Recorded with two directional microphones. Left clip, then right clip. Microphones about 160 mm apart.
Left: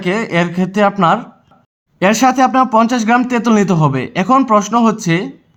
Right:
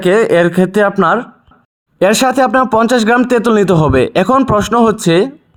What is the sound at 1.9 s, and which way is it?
Speech, 35° right (ahead or behind).